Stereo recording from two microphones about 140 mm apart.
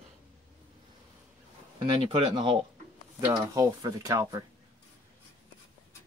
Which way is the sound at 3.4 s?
25° right (ahead or behind).